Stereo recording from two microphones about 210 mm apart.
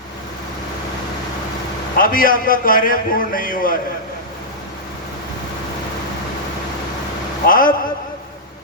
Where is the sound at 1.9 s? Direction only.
40° left (ahead or behind).